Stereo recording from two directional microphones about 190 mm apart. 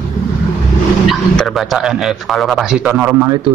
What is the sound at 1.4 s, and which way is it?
A man's voice, centre (ahead or behind).